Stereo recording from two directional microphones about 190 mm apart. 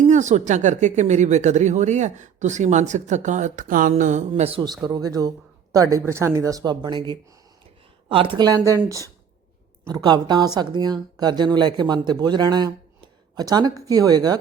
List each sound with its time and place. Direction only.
0.1 s speech: 40° right (ahead or behind); by 14.3 s 20° right (ahead or behind)